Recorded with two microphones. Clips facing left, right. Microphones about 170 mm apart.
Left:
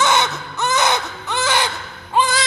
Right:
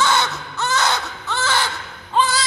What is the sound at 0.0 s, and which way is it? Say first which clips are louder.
Baby cry: left 2 dB; 20° left (ahead or behind).